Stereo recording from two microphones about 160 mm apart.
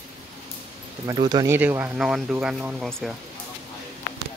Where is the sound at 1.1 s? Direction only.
30° right (ahead or behind).